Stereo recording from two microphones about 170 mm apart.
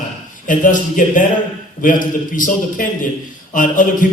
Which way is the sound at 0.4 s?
50° left (ahead or behind).